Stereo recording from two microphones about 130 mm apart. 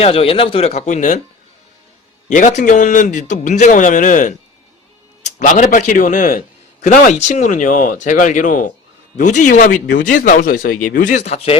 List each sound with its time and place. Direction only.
0.0 s speech: 45° left (ahead or behind); by 1.2 s 65° left (ahead or behind)
2.3 s a man's voice: 70° left (ahead or behind); by 8.7 s 90° left
9.1 s speech: 70° left (ahead or behind)